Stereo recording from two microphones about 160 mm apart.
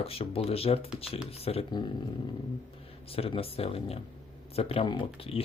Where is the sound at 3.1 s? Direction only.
35° left (ahead or behind).